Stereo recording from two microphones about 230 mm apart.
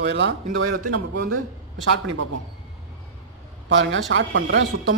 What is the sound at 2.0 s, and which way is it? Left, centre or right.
Speech, right.